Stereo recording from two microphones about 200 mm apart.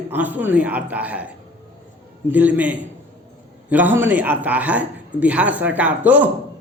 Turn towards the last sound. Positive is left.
turn(degrees=-10)  # may be behind; listen again after turning